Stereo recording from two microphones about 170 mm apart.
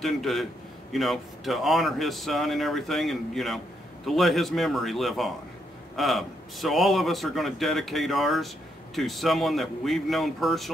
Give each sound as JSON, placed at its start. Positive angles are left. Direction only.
{"t": 0.0, "sound": "speech", "side_deg": 0}